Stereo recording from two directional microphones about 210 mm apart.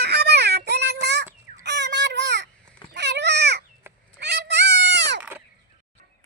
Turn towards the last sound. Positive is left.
turn(degrees=-10)  # may be behind; listen again after turning